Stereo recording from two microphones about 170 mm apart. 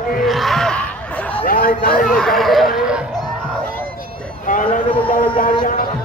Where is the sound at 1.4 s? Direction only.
55° left (ahead or behind).